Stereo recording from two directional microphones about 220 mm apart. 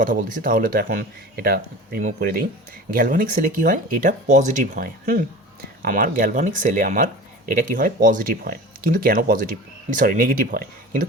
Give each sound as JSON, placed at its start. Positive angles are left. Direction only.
{"t": 0.0, "sound": "speech", "side_deg": -35}